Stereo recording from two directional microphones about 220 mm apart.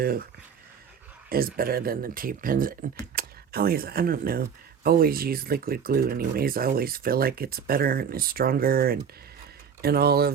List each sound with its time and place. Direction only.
1.3 s speech: 40° right (ahead or behind)